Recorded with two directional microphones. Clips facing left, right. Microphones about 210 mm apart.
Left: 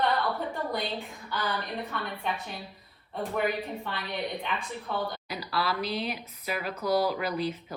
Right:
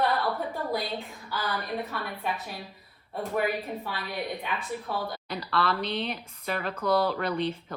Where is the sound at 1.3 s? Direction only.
5° right (ahead or behind).